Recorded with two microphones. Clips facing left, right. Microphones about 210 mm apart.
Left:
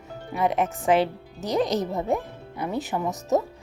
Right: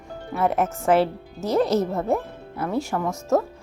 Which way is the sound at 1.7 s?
15° left (ahead or behind).